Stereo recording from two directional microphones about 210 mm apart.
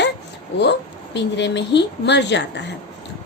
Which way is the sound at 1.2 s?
55° left (ahead or behind).